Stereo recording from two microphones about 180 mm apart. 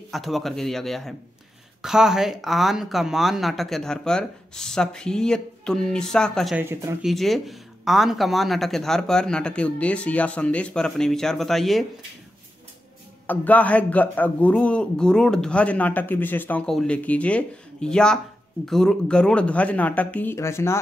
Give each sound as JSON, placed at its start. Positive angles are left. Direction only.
{"t": 0.1, "sound": "speech", "side_deg": 0}
{"t": 6.5, "sound": "speech", "side_deg": -15}
{"t": 7.0, "sound": "speech", "side_deg": 0}
{"t": 13.3, "sound": "speech", "side_deg": 10}